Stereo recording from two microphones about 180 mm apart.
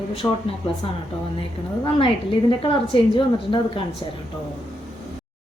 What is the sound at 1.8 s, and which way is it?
Speech, 30° left (ahead or behind).